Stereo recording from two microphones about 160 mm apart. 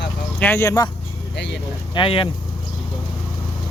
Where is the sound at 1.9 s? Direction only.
35° left (ahead or behind).